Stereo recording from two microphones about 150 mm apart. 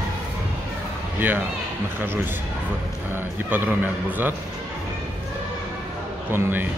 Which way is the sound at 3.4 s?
10° right (ahead or behind).